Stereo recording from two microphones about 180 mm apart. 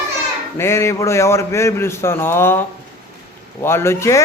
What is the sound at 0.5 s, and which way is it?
Speech, 15° left (ahead or behind).